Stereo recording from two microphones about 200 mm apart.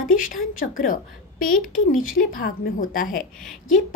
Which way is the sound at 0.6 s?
45° left (ahead or behind).